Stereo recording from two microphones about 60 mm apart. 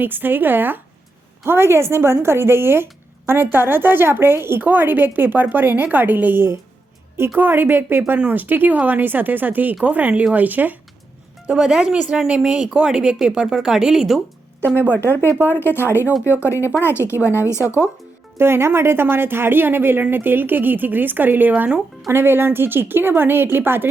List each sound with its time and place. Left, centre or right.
0.0 s a woman's voice: right
1.5 s a woman's voice: right
11.5 s speech: centre
14.8 s speech: left
17.0 s speech: right
17.3 s speech: left
18.3 s a woman's voice: right